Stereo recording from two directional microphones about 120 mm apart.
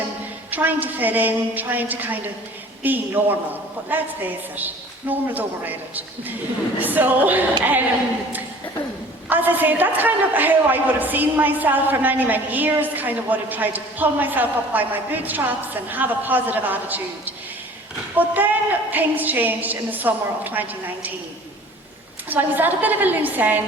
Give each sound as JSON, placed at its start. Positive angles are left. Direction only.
{"t": 0.5, "sound": "a woman's voice", "side_deg": -15}
{"t": 9.3, "sound": "a woman's voice", "side_deg": -15}
{"t": 22.3, "sound": "a woman's voice", "side_deg": -15}